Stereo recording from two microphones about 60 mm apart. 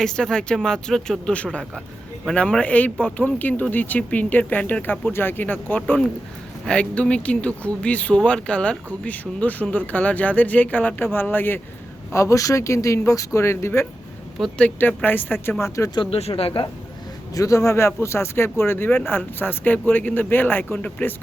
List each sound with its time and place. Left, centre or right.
0.0 s speech: centre
2.3 s speech: centre
6.7 s speech: centre; by 11.6 s left
12.1 s speech: left
13.4 s speech: left
14.6 s speech: left
17.3 s speech: left